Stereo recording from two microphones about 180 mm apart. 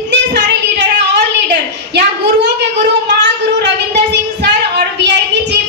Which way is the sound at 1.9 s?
75° right (ahead or behind).